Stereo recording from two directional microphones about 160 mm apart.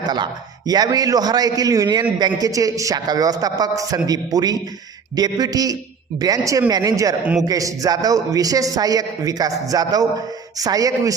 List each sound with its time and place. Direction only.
0.7 s a man's voice: 25° right (ahead or behind)